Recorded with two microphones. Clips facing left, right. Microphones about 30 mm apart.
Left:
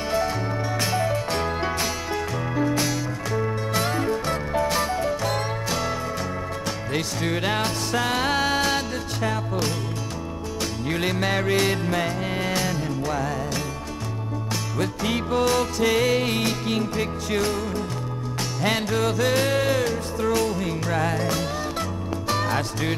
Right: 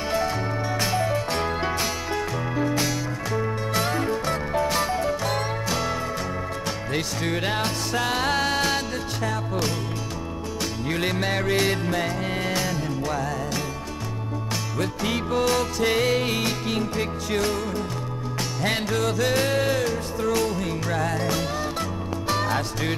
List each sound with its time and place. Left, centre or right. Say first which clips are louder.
0.1 s music: left 1 dB; centre
10.9 s music: left 1 dB; centre
14.8 s music: left 1 dB; centre
15.8 s music: left 2 dB; centre
16.4 s music: left 1 dB; centre
18.9 s music: even; centre